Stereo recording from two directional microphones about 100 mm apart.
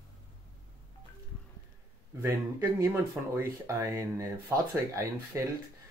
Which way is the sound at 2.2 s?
30° right (ahead or behind).